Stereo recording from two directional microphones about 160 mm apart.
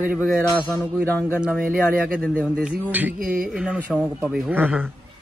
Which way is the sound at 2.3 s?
5° right (ahead or behind).